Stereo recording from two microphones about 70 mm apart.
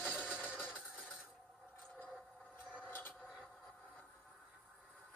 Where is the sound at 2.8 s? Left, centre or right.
Left.